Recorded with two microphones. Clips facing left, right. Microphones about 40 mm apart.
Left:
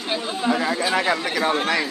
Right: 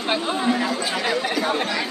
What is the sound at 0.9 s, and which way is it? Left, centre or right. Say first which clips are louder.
Speech: left 1 dB; left.